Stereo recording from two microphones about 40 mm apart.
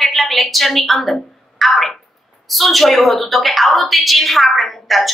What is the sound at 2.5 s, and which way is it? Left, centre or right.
A woman's voice, centre.